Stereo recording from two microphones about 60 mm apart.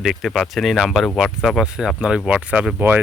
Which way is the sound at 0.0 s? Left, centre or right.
Centre.